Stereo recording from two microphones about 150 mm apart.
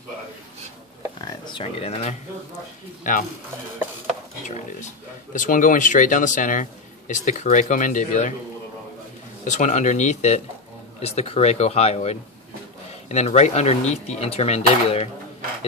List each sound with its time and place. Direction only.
1.4 s speech: 35° left (ahead or behind)
3.0 s speech: 60° left (ahead or behind)
5.3 s speech: 60° left (ahead or behind)
9.5 s speech: 50° left (ahead or behind)